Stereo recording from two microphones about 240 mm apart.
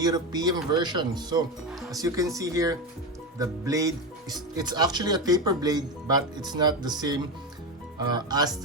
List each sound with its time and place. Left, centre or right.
0.0 s speech: centre